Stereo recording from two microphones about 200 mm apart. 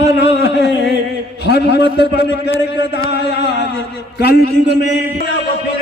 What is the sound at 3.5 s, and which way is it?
A man's voice, 60° left (ahead or behind).